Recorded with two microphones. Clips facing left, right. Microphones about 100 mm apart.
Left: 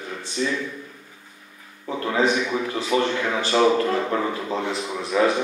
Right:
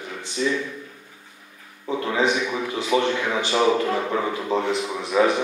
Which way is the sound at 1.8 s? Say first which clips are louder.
Even; 20° right (ahead or behind).